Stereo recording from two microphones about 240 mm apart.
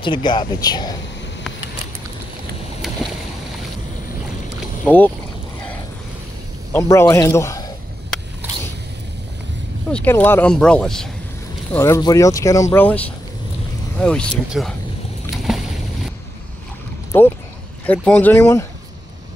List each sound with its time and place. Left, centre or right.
0.0 s speech: centre
4.8 s speech: centre
6.7 s a man's voice: centre
9.8 s speech: centre
15.3 s boat: centre
17.1 s speech: centre